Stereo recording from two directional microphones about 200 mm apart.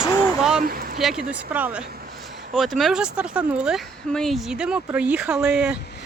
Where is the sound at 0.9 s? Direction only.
Centre (ahead or behind).